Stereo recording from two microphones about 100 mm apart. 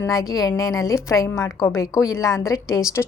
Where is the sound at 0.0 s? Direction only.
35° left (ahead or behind).